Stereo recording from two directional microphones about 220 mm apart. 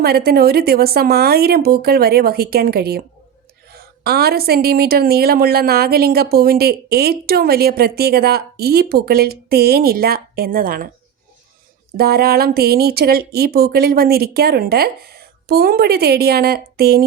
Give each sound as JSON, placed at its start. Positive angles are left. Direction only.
{"t": 0.0, "sound": "a woman's voice", "side_deg": -45}
{"t": 11.9, "sound": "a woman's voice", "side_deg": -45}